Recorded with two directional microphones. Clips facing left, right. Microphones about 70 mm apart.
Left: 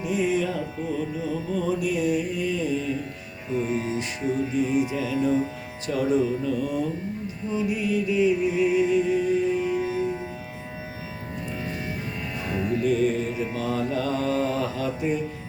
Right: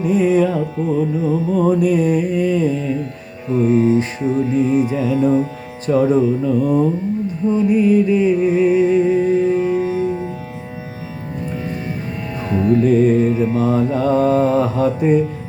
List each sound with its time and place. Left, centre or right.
0.0 s music: right
12.7 s music: right